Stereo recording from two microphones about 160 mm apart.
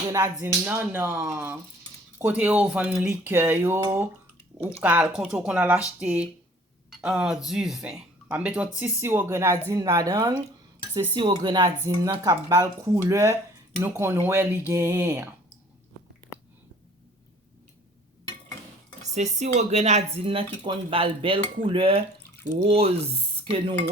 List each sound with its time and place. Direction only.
0.3 s speech: 10° right (ahead or behind)
19.0 s speech: 45° right (ahead or behind)